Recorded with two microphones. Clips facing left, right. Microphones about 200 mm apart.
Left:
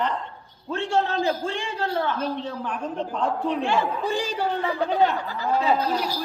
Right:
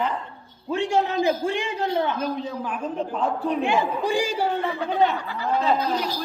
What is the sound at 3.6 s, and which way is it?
Speech, 15° right (ahead or behind).